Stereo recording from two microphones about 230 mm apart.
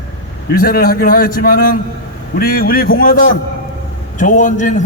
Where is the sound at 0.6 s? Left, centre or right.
Left.